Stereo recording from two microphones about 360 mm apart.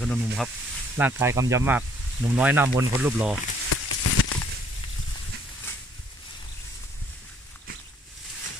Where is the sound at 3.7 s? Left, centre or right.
Left.